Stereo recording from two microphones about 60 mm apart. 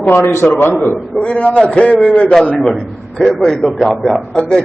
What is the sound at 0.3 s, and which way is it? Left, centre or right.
Speech, left.